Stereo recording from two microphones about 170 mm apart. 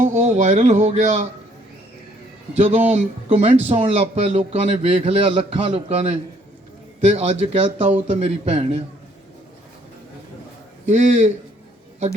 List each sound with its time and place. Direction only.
0.0 s speech: 45° right (ahead or behind)
2.6 s a man's voice: 40° right (ahead or behind)
10.8 s a man's voice: 45° right (ahead or behind)